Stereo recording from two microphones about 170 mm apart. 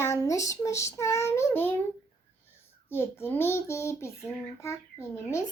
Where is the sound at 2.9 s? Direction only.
15° left (ahead or behind).